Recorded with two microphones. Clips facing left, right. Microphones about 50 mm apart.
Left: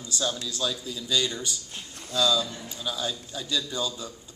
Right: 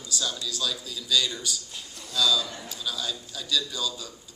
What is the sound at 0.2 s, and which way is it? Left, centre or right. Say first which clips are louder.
A man's voice: left 2 dB; left.